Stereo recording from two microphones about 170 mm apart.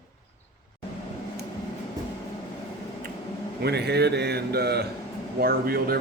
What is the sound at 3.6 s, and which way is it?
Speech, 75° right (ahead or behind).